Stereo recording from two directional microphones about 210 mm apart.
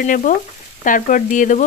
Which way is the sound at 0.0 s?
40° left (ahead or behind).